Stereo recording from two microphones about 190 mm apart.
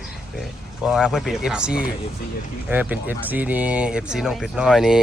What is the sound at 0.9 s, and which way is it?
Speech, 5° right (ahead or behind).